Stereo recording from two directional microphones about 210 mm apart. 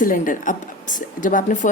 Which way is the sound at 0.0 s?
40° left (ahead or behind).